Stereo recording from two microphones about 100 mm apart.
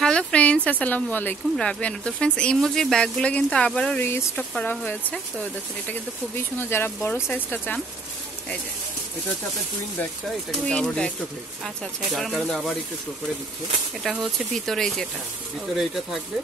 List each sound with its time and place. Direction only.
0.0 s speech: 10° left (ahead or behind)
4.0 s speech: 25° left (ahead or behind)
10.7 s speech: 10° left (ahead or behind)
14.5 s speech: 5° left (ahead or behind)